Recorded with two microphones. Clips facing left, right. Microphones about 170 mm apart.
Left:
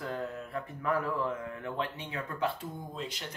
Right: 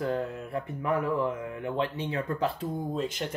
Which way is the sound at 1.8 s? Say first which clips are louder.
Right 8 dB; 30° right (ahead or behind).